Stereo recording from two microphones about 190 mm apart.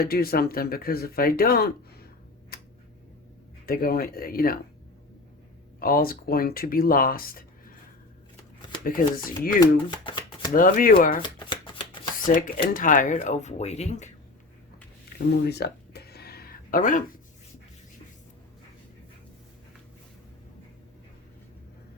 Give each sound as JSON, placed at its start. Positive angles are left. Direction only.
{"t": 0.0, "sound": "speech", "side_deg": 55}
{"t": 3.7, "sound": "speech", "side_deg": 50}
{"t": 5.8, "sound": "speech", "side_deg": 50}
{"t": 8.8, "sound": "speech", "side_deg": 50}
{"t": 9.6, "sound": "chopping", "side_deg": 25}
{"t": 10.5, "sound": "speech", "side_deg": 45}
{"t": 11.2, "sound": "shuffling cards", "side_deg": 25}
{"t": 12.2, "sound": "speech", "side_deg": 50}
{"t": 15.4, "sound": "a sound", "side_deg": 60}